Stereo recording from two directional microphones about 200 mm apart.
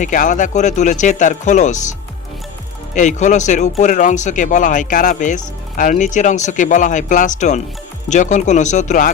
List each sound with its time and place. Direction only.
0.0 s speech: 40° left (ahead or behind)